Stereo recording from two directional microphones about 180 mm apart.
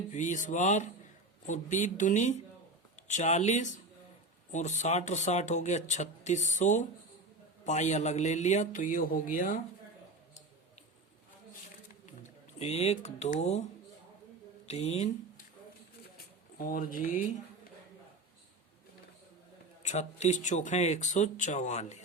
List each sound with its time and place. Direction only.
0.1 s a man's voice: 45° left (ahead or behind)
12.5 s speech: 35° left (ahead or behind)
14.7 s speech: 40° left (ahead or behind)
16.1 s a sound: 50° left (ahead or behind)
19.8 s speech: 40° left (ahead or behind)